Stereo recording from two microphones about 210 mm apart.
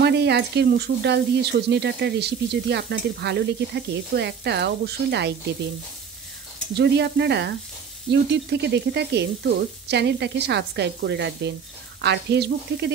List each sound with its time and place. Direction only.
0.0 s speech: 55° right (ahead or behind)
6.7 s speech: 50° right (ahead or behind)